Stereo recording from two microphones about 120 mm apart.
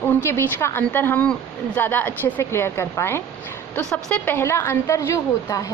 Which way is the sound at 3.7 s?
5° left (ahead or behind).